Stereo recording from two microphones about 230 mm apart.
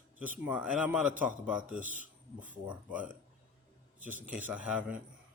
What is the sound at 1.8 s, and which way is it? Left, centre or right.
Speech, right.